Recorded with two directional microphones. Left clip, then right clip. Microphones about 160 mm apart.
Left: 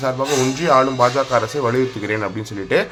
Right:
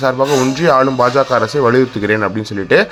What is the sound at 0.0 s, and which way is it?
Speech, 30° right (ahead or behind).